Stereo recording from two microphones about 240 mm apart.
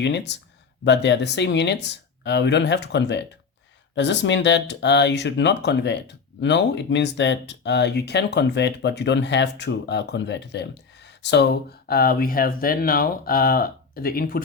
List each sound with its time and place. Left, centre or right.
0.0 s speech: left